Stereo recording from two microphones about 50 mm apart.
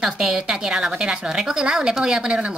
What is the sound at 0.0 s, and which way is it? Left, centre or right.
A woman's voice, centre.